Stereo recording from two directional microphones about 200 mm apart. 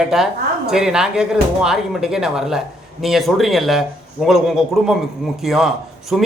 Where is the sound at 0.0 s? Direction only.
Centre (ahead or behind).